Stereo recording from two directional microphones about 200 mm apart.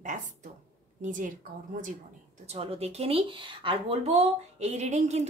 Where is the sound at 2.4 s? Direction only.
30° right (ahead or behind).